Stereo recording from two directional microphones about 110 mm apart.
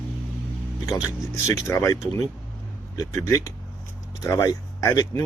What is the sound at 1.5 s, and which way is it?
Speech, 25° left (ahead or behind).